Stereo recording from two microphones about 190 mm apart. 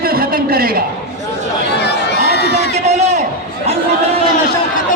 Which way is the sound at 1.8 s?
60° left (ahead or behind).